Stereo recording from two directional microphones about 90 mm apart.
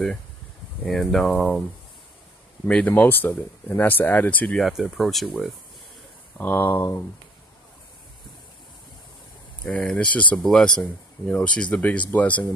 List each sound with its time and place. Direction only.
0.8 s speech: centre (ahead or behind)
2.7 s speech: 20° left (ahead or behind)
4.6 s speech: 5° right (ahead or behind)
6.4 s speech: 25° left (ahead or behind)
9.7 s speech: 10° left (ahead or behind)